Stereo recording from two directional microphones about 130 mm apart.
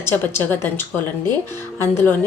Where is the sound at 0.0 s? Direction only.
15° left (ahead or behind).